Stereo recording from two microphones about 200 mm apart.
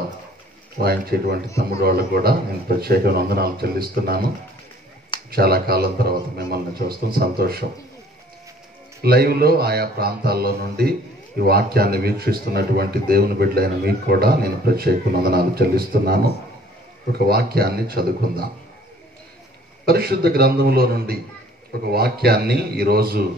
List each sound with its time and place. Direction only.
0.7 s speech: 50° right (ahead or behind)
5.3 s speech: 50° right (ahead or behind)
9.0 s speech: 50° right (ahead or behind)
19.9 s speech: 50° right (ahead or behind)